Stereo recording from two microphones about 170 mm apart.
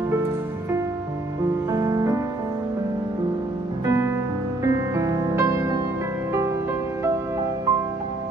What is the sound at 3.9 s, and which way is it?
Music, 15° right (ahead or behind).